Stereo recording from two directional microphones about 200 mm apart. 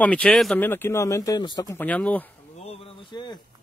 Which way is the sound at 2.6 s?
30° left (ahead or behind).